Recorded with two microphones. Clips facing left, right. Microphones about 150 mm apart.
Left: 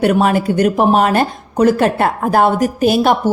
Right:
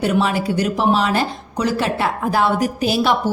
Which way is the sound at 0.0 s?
55° left (ahead or behind).